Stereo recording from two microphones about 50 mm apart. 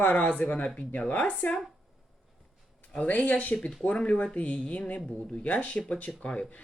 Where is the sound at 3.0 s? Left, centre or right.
Left.